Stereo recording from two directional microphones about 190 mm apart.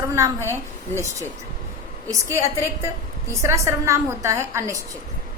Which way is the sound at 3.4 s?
15° right (ahead or behind).